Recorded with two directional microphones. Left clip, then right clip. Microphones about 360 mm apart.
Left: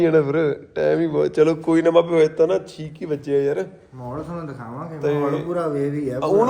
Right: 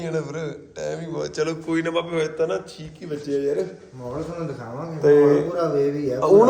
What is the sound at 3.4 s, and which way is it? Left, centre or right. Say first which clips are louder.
Speech: left 2 dB; centre.